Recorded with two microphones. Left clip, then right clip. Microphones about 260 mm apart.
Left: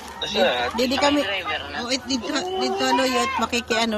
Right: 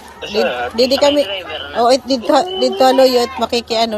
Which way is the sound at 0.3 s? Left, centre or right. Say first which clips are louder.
Right 4 dB; centre.